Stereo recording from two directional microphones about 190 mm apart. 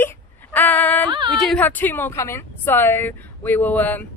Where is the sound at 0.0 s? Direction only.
10° left (ahead or behind).